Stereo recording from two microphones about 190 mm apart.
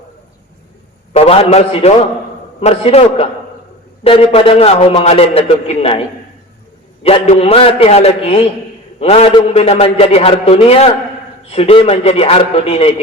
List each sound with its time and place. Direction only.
1.1 s a man's voice: 30° left (ahead or behind)
7.0 s a man's voice: 30° left (ahead or behind)